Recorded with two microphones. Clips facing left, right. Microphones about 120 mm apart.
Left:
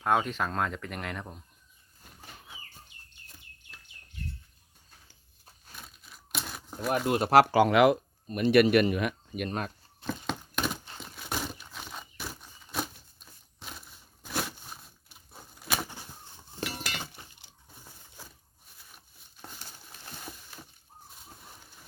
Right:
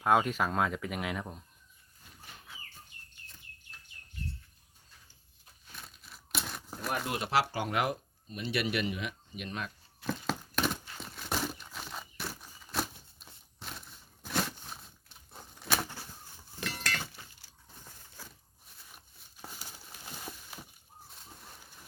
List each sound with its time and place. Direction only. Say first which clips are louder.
0.0 s speech: even; 5° right (ahead or behind)
5.7 s tearing: left 1 dB; centre (ahead or behind)
7.1 s speech: left 10 dB; 45° left (ahead or behind)
7.5 s speech: left 11 dB; 90° left
8.3 s speech: left 12 dB; 50° left (ahead or behind)
10.1 s a sound: even; centre (ahead or behind)
10.9 s crumpling: even; centre (ahead or behind)
13.6 s a sound: even; centre (ahead or behind)
16.7 s chink: right 1 dB; 15° left (ahead or behind)
18.9 s a sound: even; 5° right (ahead or behind)